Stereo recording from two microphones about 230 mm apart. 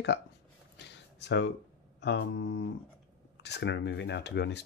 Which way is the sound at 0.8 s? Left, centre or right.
Left.